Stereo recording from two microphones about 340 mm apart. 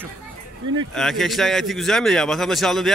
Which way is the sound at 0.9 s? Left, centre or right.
Centre.